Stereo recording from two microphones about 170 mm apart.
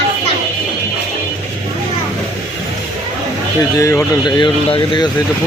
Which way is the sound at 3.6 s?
20° left (ahead or behind).